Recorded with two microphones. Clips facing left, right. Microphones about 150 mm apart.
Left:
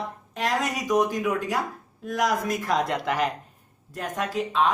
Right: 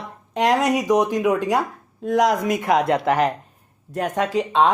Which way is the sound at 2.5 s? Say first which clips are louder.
Right 6 dB; 75° right (ahead or behind).